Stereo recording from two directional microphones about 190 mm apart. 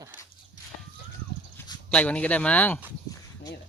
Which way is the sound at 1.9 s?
5° left (ahead or behind).